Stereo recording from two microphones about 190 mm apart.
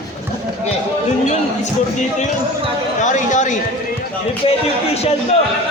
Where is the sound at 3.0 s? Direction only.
40° left (ahead or behind).